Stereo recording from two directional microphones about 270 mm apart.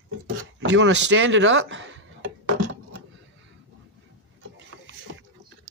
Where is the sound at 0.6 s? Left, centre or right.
Right.